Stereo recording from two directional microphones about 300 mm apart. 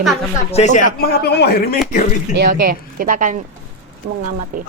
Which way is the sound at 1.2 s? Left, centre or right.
Left.